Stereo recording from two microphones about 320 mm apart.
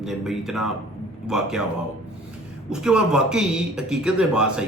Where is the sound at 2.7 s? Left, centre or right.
Centre.